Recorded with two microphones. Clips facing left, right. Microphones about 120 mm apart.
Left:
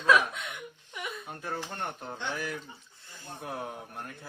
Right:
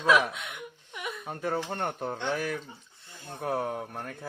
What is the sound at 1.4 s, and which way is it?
Speech, 65° right (ahead or behind).